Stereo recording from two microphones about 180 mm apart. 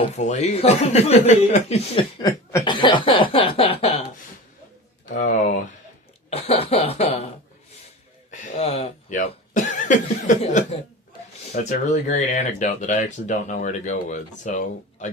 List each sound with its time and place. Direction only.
0.0 s speech: 40° left (ahead or behind)
2.2 s chuckle: 20° left (ahead or behind)
2.7 s cough: 25° left (ahead or behind)
5.1 s a sound: 45° left (ahead or behind)
6.3 s cough: 35° left (ahead or behind)
8.3 s a sound: 35° left (ahead or behind)
10.2 s chuckle: 45° left (ahead or behind)
11.5 s a sound: 50° left (ahead or behind)
11.9 s speech: 40° left (ahead or behind)